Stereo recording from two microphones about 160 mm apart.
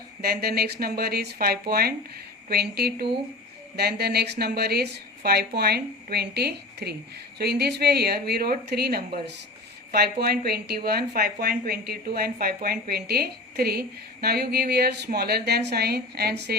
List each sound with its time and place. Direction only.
0.2 s a woman's voice: 75° right (ahead or behind)